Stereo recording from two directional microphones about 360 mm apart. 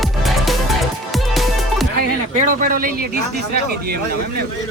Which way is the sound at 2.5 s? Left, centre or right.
Right.